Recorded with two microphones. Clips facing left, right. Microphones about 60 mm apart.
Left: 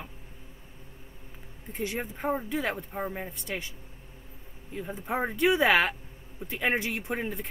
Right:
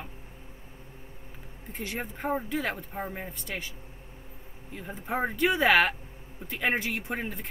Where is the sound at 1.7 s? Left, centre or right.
Centre.